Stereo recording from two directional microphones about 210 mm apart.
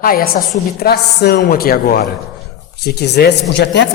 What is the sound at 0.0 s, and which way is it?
Speech, 45° left (ahead or behind).